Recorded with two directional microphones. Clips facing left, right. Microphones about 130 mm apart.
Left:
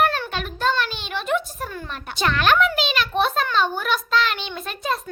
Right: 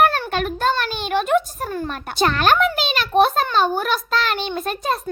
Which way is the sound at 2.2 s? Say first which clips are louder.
Right 2 dB; 40° right (ahead or behind).